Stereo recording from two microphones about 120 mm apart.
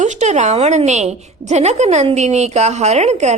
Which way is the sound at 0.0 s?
75° right (ahead or behind).